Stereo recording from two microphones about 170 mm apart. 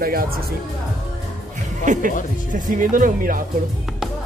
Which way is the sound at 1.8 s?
45° right (ahead or behind).